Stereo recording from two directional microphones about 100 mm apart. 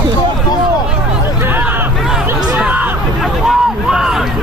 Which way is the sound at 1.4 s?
20° right (ahead or behind).